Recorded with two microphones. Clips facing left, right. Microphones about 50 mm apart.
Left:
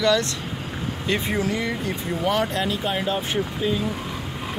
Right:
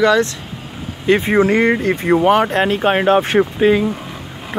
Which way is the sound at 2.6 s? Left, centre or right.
Right.